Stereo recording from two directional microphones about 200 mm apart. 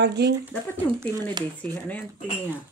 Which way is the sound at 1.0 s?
20° right (ahead or behind).